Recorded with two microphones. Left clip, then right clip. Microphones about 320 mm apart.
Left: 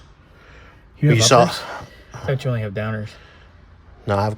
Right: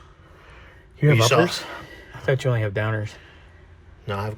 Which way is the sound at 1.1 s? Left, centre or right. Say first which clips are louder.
Left 5 dB; left.